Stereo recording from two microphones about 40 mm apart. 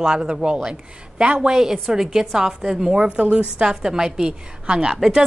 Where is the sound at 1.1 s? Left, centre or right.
Right.